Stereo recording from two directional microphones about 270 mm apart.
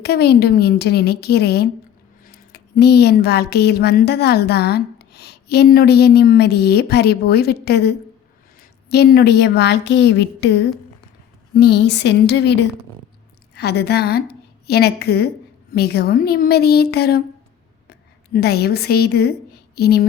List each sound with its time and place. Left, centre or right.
0.0 s a woman's voice: left
18.3 s speech: left